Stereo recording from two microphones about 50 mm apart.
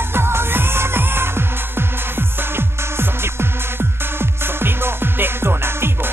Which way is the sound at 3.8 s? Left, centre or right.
Right.